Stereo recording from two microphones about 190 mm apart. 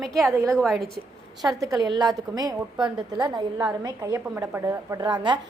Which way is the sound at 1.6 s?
20° right (ahead or behind).